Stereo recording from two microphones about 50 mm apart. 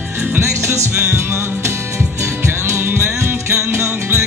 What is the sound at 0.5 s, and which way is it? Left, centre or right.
Music, right.